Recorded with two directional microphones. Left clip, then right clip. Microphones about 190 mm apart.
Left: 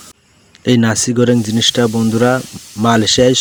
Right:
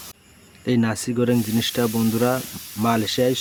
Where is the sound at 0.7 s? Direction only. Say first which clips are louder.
Left 9 dB; 35° left (ahead or behind).